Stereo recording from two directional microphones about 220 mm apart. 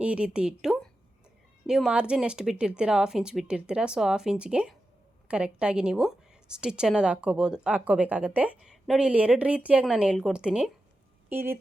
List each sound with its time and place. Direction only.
0.0 s a woman's voice: 5° right (ahead or behind)